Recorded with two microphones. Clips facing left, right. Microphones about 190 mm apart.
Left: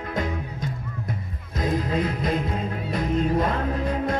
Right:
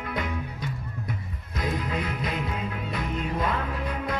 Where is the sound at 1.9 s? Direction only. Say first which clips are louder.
Left 6 dB; 45° left (ahead or behind).